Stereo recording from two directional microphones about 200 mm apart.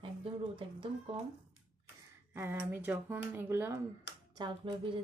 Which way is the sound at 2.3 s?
10° right (ahead or behind).